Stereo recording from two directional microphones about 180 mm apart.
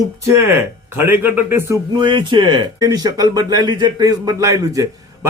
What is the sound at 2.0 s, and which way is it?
Speech, 25° right (ahead or behind).